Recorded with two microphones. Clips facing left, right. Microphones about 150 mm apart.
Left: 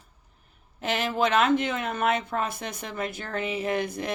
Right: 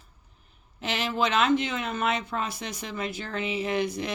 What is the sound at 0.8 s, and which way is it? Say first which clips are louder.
Speech: left 2 dB; 50° left (ahead or behind).